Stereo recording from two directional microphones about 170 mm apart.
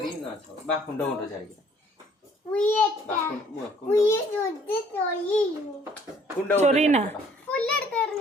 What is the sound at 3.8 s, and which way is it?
Speech, 15° left (ahead or behind).